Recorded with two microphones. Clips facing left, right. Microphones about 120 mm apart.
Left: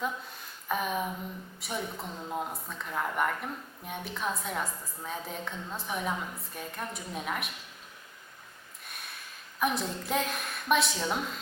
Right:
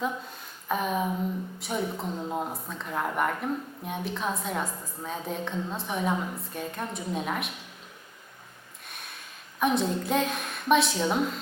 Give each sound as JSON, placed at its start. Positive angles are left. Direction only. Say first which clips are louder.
{"t": 0.7, "sound": "a woman's voice", "louder": "right 4 dB", "side_deg": 0}
{"t": 8.9, "sound": "a sound", "louder": "right 1 dB", "side_deg": 0}
{"t": 9.6, "sound": "a woman's voice", "louder": "right 5 dB", "side_deg": 0}